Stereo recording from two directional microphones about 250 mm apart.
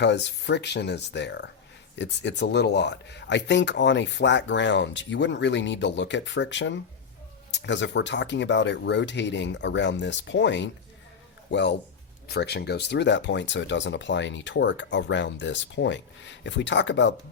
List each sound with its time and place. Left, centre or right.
0.0 s speech: left